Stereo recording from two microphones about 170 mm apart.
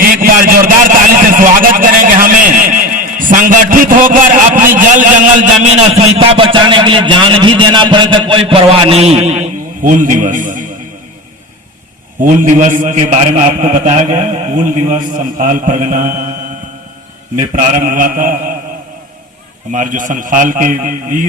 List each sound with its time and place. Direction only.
0.0 s a sound: 55° right (ahead or behind)
4.8 s a man's voice: 50° right (ahead or behind)
12.2 s a man's voice: 50° right (ahead or behind)
17.8 s a man's voice: 55° right (ahead or behind)
19.7 s a man's voice: 50° right (ahead or behind)